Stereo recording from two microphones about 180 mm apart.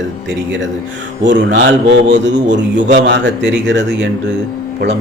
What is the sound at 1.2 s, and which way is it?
A man's voice, 90° right.